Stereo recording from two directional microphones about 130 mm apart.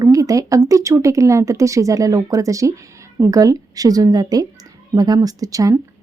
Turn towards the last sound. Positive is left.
turn(degrees=-25)  # may be behind; listen again after turning